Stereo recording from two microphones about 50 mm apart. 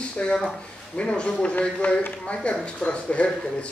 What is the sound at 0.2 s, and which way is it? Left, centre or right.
A man's voice, centre.